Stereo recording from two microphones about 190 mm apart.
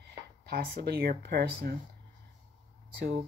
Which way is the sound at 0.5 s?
55° right (ahead or behind).